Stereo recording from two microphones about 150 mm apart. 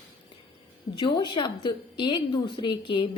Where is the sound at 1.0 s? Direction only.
30° left (ahead or behind).